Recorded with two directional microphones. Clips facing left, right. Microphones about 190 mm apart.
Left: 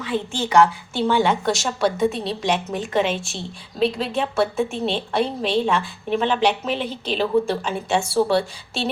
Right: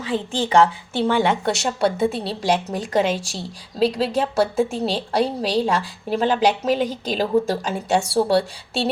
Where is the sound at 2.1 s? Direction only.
30° right (ahead or behind).